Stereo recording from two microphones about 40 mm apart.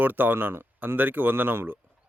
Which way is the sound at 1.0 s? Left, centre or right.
Right.